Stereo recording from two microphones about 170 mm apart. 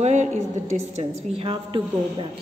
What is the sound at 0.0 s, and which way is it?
A woman's voice, 40° right (ahead or behind).